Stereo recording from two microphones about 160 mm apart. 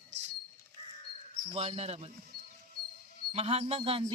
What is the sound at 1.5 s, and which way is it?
Speech, 40° right (ahead or behind).